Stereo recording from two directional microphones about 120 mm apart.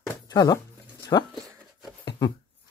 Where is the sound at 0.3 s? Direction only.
30° left (ahead or behind).